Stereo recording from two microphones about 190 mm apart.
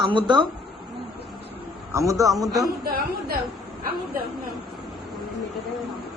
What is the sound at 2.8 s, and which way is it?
Speech, 55° right (ahead or behind).